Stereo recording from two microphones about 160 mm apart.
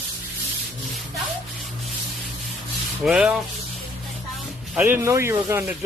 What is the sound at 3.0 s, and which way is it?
Speech, 5° right (ahead or behind).